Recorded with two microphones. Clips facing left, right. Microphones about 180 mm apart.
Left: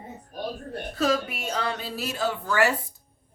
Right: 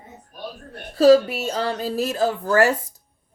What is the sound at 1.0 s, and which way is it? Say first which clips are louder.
Speech: right 12 dB; 30° right (ahead or behind).